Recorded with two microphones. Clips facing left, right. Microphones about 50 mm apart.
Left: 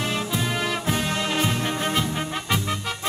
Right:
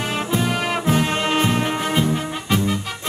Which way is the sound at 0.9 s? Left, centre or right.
Right.